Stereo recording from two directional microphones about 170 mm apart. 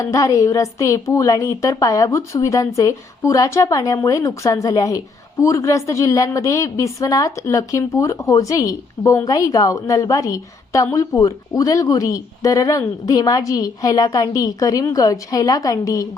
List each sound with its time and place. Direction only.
0.0 s a woman's voice: 20° left (ahead or behind)